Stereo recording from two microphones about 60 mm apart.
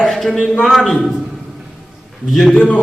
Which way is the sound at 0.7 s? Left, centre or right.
Centre.